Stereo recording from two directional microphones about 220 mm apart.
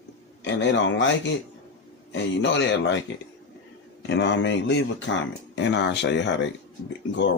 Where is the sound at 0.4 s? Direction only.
55° left (ahead or behind).